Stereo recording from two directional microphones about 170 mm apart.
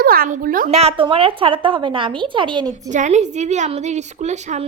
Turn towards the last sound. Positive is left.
turn(degrees=-45)  # may be behind; listen again after turning